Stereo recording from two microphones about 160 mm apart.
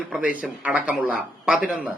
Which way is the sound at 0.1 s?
10° right (ahead or behind).